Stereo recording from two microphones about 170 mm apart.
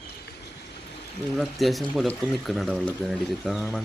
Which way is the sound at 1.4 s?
Centre (ahead or behind).